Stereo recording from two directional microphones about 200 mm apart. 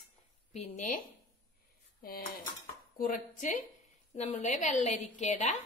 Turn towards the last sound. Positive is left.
turn(degrees=35)  # may be behind; listen again after turning